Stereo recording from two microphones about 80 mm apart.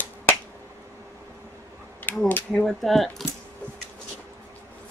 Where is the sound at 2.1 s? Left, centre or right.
Left.